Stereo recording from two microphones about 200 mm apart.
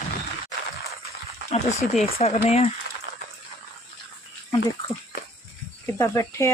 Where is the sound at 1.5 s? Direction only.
35° left (ahead or behind).